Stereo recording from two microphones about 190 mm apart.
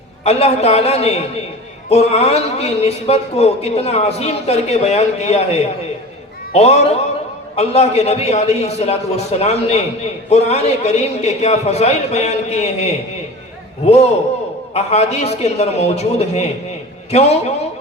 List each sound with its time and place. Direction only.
0.3 s a man's voice: 35° left (ahead or behind)
14.7 s a man's voice: 35° left (ahead or behind)